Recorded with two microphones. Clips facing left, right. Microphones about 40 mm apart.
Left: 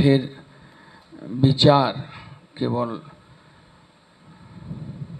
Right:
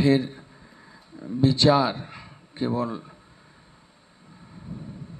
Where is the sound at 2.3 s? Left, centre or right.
Centre.